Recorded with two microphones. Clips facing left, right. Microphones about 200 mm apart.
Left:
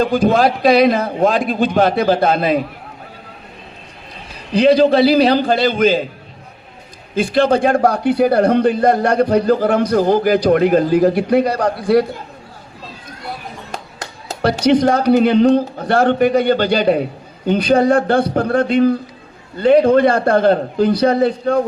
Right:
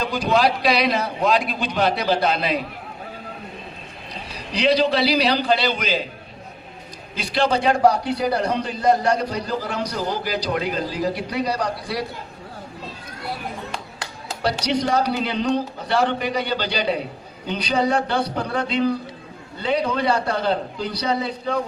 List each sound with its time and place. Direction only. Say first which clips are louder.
0.0 s a man's voice: left 6 dB; 50° left (ahead or behind)
4.5 s a man's voice: left 8 dB; 50° left (ahead or behind)
7.2 s a man's voice: left 8 dB; 50° left (ahead or behind)
13.7 s a man's voice: left 3 dB; 45° left (ahead or behind)